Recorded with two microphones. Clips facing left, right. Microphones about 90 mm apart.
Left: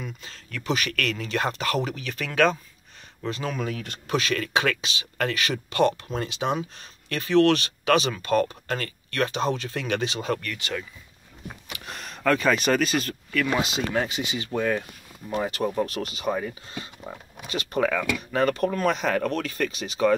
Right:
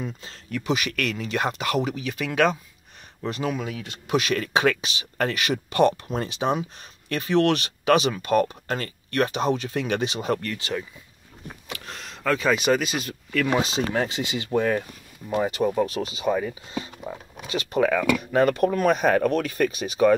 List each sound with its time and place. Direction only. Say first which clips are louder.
0.0 s speech: right 4 dB; 25° right (ahead or behind)
0.7 s speech: even; 15° right (ahead or behind)
3.5 s speech: left 1 dB; 5° right (ahead or behind)
4.1 s speech: right 2 dB; 20° right (ahead or behind)
11.7 s speech: right 1 dB; 10° left (ahead or behind)
13.3 s speech: right 2 dB; 30° right (ahead or behind)
15.2 s speech: right 3 dB; 15° right (ahead or behind)
16.3 s speech: right 3 dB; centre (ahead or behind)
17.7 s speech: right 4 dB; 5° right (ahead or behind)
18.4 s speech: right 2 dB; 15° right (ahead or behind)